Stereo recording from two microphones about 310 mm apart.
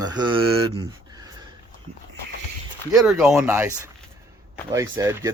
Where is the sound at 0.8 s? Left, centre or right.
Centre.